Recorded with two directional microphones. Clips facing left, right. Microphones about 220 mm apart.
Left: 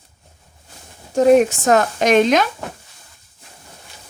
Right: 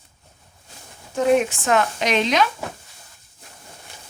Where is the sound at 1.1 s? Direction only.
40° left (ahead or behind).